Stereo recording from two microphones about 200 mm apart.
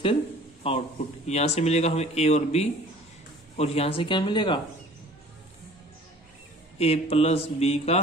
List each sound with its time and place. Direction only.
0.7 s speech: 35° left (ahead or behind)
6.8 s speech: 30° left (ahead or behind)